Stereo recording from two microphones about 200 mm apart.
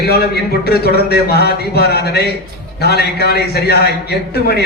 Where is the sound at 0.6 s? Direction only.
50° left (ahead or behind).